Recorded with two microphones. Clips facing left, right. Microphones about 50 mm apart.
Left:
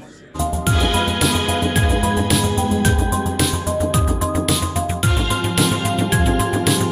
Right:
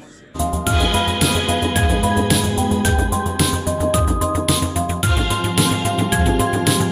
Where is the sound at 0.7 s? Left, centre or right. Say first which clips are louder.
Even; centre.